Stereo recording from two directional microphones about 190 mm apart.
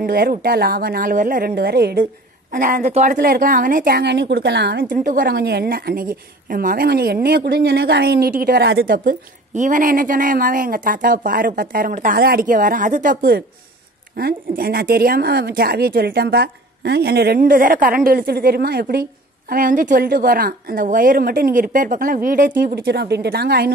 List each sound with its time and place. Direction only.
0.0 s a woman's voice: 50° right (ahead or behind)
2.5 s a woman's voice: 45° right (ahead or behind); by 4.8 s 60° right (ahead or behind)
4.8 s a woman's voice: 45° right (ahead or behind)
22.6 s a woman's voice: 60° right (ahead or behind)